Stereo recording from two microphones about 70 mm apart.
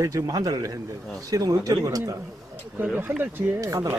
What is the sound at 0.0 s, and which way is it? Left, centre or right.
A man's voice, right.